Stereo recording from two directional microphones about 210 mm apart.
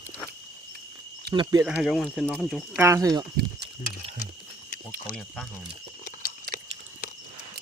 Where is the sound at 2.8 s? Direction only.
15° right (ahead or behind).